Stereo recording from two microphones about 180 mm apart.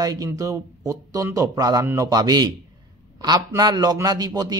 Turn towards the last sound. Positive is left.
turn(degrees=-20)  # may be behind; listen again after turning